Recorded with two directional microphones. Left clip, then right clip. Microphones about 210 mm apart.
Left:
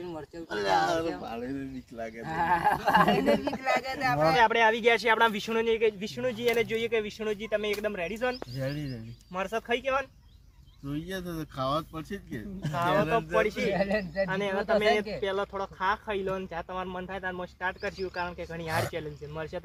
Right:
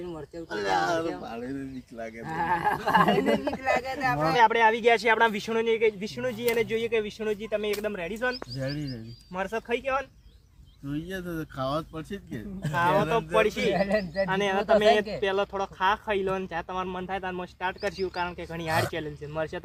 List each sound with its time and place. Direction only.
0.0 s a sound: 35° left (ahead or behind)
0.5 s speech: centre (ahead or behind)
2.2 s speech: 35° left (ahead or behind)
4.4 s speech: 10° right (ahead or behind)
8.5 s speech: 30° left (ahead or behind)
9.3 s speech: centre (ahead or behind)
10.8 s speech: 25° left (ahead or behind); by 12.4 s 5° left (ahead or behind)
12.6 s speech: 30° right (ahead or behind)
12.9 s speech: centre (ahead or behind)
13.1 s speech: 40° right (ahead or behind)
13.7 s speech: 15° right (ahead or behind)
14.3 s speech: 40° right (ahead or behind)